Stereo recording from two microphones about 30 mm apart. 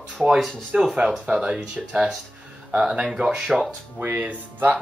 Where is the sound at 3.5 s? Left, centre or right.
Centre.